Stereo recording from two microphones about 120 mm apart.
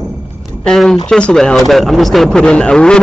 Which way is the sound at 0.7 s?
5° left (ahead or behind).